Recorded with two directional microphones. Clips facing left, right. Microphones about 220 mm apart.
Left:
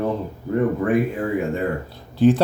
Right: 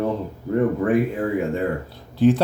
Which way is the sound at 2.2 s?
35° left (ahead or behind).